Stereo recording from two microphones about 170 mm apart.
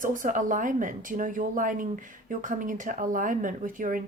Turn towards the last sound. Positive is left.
turn(degrees=-55)  # may be behind; listen again after turning